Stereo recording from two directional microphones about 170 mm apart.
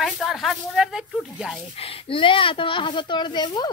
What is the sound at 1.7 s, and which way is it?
Speech, 35° left (ahead or behind).